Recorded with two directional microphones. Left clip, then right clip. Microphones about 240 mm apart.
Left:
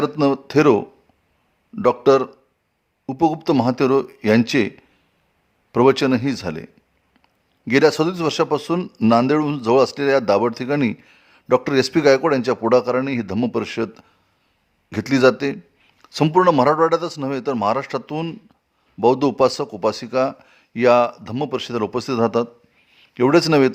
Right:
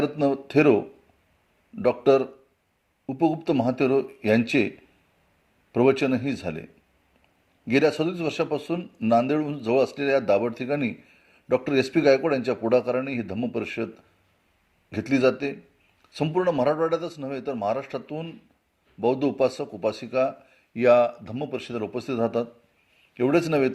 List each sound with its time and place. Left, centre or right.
0.0 s a man's voice: centre
5.7 s a man's voice: left
7.7 s a man's voice: left